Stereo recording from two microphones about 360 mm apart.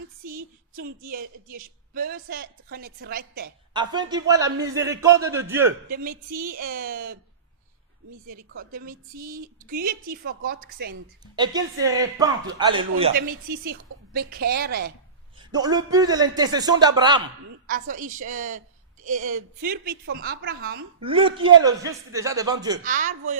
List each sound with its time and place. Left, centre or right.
0.3 s music: right
1.5 s a man's voice: right
3.7 s a man's voice: centre
5.9 s a man's voice: right
8.3 s a man's voice: right
11.3 s a man's voice: centre; by 14.9 s right
15.5 s a man's voice: centre
17.7 s a man's voice: right
21.0 s a man's voice: centre
22.8 s a man's voice: right